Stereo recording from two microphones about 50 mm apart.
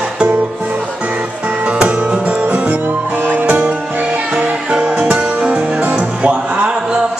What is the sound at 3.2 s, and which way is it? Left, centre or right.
Music, right.